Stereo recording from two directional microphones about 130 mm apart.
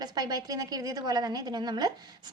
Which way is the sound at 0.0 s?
30° right (ahead or behind).